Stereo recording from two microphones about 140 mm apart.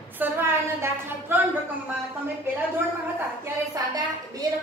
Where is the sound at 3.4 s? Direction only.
25° right (ahead or behind).